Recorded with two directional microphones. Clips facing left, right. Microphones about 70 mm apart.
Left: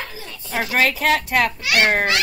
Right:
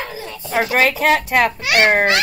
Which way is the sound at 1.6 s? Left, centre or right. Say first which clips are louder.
Right 3 dB; right.